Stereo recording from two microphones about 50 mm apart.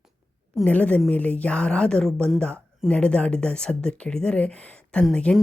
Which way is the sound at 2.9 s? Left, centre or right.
Left.